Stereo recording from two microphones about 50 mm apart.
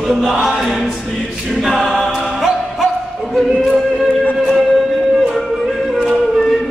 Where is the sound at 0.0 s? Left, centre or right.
Centre.